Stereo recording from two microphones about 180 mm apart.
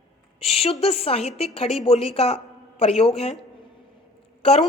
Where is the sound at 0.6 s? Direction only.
35° left (ahead or behind).